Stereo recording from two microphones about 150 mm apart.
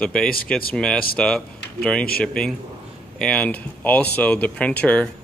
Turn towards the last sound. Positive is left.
turn(degrees=10)  # may be behind; listen again after turning